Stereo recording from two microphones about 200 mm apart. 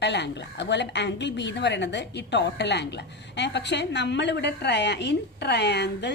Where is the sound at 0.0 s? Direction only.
60° left (ahead or behind).